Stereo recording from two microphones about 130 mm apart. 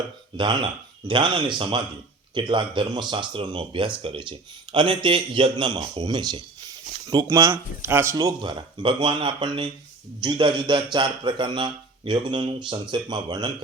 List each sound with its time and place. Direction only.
0.3 s speech: 40° right (ahead or behind); by 8.1 s 20° right (ahead or behind)
8.1 s speech: 30° right (ahead or behind)